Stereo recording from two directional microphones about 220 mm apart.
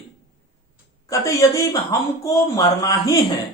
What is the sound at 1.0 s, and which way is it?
Speech, 15° left (ahead or behind).